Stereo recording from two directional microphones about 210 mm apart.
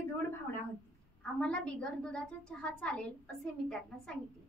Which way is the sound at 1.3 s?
5° left (ahead or behind).